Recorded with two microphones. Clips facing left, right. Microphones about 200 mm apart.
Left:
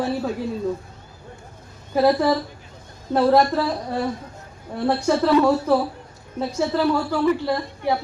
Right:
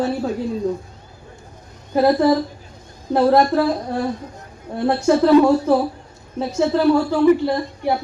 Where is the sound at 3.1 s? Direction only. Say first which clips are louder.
Right 2 dB; 15° right (ahead or behind).